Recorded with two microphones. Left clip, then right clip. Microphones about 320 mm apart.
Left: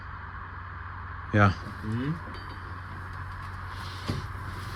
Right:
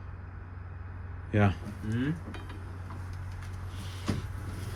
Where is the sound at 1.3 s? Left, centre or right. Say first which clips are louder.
Left 6 dB; centre.